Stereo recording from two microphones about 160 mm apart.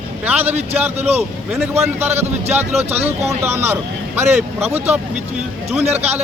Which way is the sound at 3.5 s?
15° right (ahead or behind).